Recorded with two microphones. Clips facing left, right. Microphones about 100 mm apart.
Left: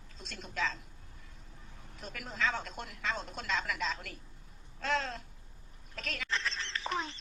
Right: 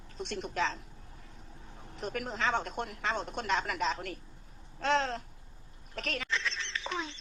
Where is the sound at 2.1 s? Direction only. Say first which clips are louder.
Right 3 dB; 55° right (ahead or behind).